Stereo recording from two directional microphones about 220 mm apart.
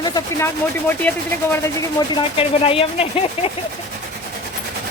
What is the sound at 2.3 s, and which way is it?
Speech, 25° left (ahead or behind).